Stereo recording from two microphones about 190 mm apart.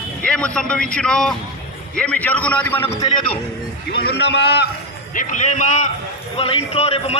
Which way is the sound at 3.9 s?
65° left (ahead or behind).